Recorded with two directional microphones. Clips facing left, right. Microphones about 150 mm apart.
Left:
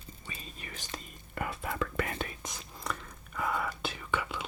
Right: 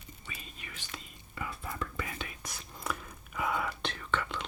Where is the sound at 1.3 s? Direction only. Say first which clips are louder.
Left 4 dB; 75° left (ahead or behind); by 2.0 s 90° left.